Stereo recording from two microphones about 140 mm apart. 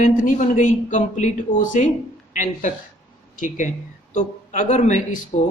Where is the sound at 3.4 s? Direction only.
65° left (ahead or behind).